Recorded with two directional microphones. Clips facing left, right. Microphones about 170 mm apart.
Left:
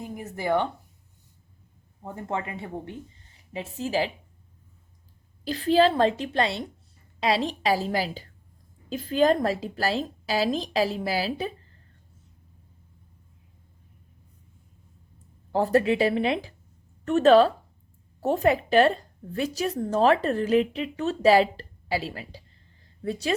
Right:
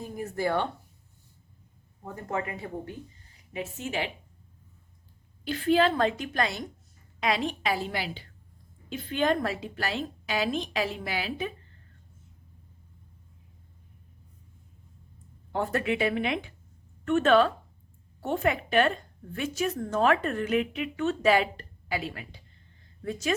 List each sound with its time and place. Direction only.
0.0 s speech: 15° left (ahead or behind)
2.3 s a woman's voice: 25° left (ahead or behind)
5.5 s a woman's voice: 35° left (ahead or behind)
15.5 s a woman's voice: 35° left (ahead or behind)